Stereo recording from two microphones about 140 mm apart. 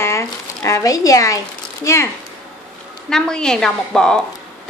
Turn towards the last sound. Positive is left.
turn(degrees=5)  # may be behind; listen again after turning